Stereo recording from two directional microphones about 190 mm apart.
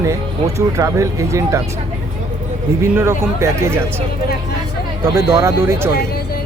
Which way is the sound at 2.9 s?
15° right (ahead or behind).